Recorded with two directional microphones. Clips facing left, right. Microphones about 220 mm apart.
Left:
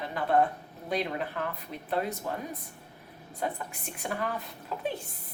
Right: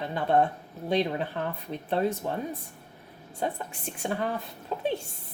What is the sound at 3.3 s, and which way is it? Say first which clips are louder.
Speech: right 2 dB; 30° right (ahead or behind).